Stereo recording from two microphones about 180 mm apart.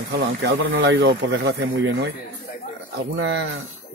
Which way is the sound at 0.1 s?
75° right (ahead or behind).